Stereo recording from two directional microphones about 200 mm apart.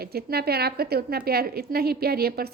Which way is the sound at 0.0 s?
50° right (ahead or behind).